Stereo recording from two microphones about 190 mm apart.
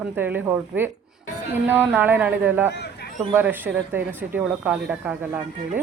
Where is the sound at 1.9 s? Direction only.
10° right (ahead or behind).